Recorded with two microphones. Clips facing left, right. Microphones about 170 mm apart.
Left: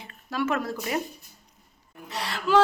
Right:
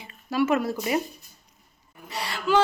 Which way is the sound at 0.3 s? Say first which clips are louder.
Right 4 dB; 10° right (ahead or behind).